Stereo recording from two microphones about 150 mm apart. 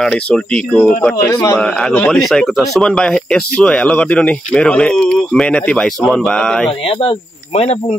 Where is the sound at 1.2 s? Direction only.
20° left (ahead or behind).